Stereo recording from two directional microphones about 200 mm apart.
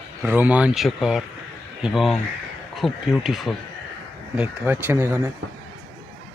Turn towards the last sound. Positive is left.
turn(degrees=-10)  # may be behind; listen again after turning